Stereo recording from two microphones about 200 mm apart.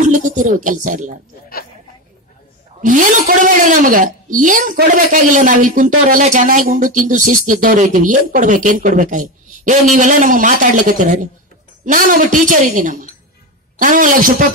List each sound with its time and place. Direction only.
0.0 s a woman's voice: 40° right (ahead or behind)
2.8 s a woman's voice: 40° right (ahead or behind)